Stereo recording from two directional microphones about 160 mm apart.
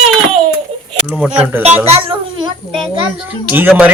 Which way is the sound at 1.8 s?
35° right (ahead or behind).